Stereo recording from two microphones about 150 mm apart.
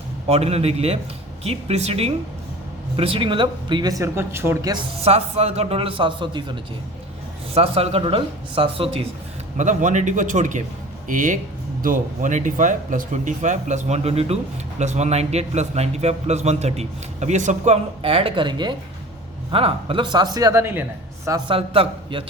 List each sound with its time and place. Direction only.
0.3 s a man's voice: 45° right (ahead or behind); by 4.8 s 20° right (ahead or behind)
4.9 s speech: 45° right (ahead or behind)
7.5 s speech: 40° right (ahead or behind)
9.6 s a man's voice: 55° right (ahead or behind)
18.0 s speech: 40° right (ahead or behind); by 20.8 s 15° right (ahead or behind)
21.2 s speech: 30° right (ahead or behind)